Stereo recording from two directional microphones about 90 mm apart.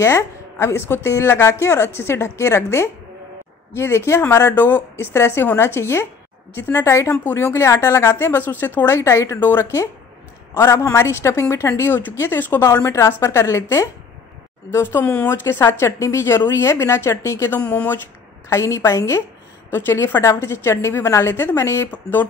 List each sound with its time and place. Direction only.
0.0 s a woman's voice: 30° left (ahead or behind)
9.4 s a woman's voice: 20° left (ahead or behind)
12.6 s a woman's voice: 35° left (ahead or behind)
17.5 s speech: 15° left (ahead or behind)
18.5 s a woman's voice: 30° left (ahead or behind)